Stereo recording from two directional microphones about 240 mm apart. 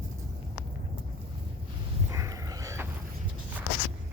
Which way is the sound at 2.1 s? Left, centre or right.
Centre.